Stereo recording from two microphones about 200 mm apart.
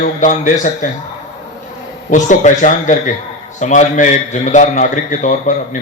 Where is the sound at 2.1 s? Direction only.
40° left (ahead or behind).